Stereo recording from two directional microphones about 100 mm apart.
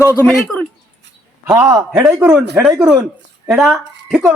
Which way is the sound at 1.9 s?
10° right (ahead or behind).